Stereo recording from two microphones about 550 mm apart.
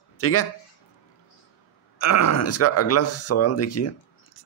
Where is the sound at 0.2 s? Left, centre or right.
Left.